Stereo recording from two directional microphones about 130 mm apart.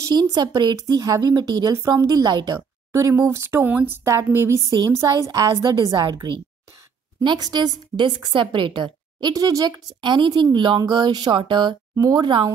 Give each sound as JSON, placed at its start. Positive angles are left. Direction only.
{"t": 0.1, "sound": "speech", "side_deg": -30}
{"t": 7.2, "sound": "a woman's voice", "side_deg": -30}